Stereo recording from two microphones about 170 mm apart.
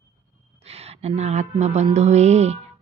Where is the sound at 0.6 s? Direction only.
35° right (ahead or behind).